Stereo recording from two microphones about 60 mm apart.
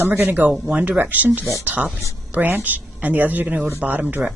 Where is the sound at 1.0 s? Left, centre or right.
Right.